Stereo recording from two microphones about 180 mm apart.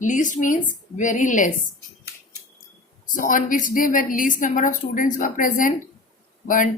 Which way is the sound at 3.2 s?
50° left (ahead or behind).